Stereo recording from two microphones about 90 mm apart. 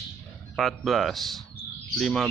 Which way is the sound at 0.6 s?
Centre (ahead or behind).